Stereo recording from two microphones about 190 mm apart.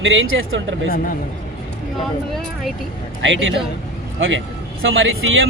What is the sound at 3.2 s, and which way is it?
A man's voice, 80° right.